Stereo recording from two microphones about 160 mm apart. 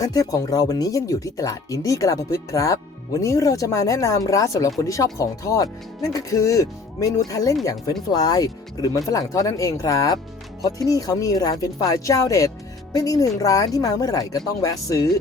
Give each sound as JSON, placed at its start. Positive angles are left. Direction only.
{"t": 0.0, "sound": "speech", "side_deg": 20}